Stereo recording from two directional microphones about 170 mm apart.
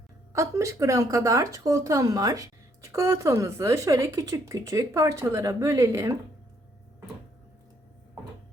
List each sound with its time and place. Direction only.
0.3 s speech: 20° right (ahead or behind)